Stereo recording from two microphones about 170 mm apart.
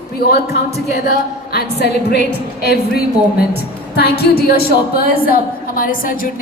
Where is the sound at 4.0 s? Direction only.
70° left (ahead or behind).